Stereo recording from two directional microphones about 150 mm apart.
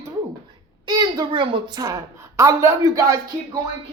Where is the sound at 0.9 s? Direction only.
25° right (ahead or behind).